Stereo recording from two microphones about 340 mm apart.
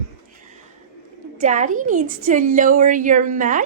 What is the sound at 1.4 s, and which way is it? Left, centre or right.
A woman's voice, right.